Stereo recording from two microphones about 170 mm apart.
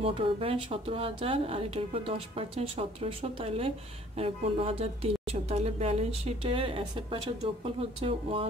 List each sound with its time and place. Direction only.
0.0 s speech: 35° right (ahead or behind)